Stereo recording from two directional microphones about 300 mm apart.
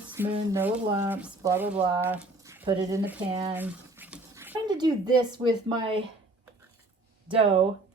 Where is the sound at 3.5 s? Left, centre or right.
Centre.